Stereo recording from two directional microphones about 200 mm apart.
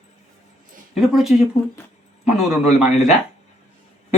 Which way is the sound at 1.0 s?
Centre (ahead or behind).